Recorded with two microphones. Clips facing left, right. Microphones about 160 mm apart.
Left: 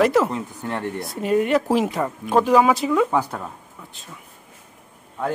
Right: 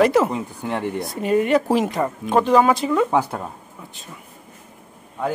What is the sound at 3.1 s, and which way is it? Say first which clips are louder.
Speech: right 2 dB; 10° right (ahead or behind).